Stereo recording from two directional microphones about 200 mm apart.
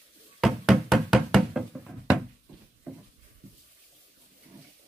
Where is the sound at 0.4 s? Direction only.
Centre (ahead or behind).